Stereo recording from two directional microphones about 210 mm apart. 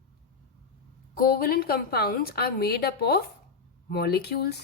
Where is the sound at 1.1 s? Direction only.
45° left (ahead or behind).